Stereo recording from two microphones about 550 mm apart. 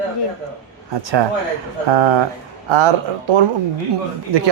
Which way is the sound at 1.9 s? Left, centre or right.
Right.